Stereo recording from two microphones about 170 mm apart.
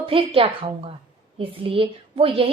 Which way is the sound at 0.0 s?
35° right (ahead or behind).